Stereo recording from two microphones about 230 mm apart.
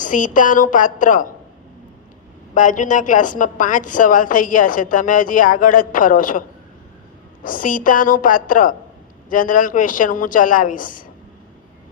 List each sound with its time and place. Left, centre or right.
0.0 s a woman's voice: left
2.6 s a woman's voice: left
7.4 s a woman's voice: left